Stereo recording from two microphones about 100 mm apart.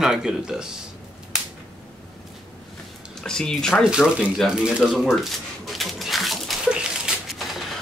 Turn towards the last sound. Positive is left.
turn(degrees=-5)  # may be behind; listen again after turning